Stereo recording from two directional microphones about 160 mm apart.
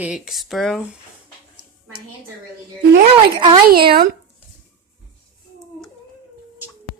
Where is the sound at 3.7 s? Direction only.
70° right (ahead or behind).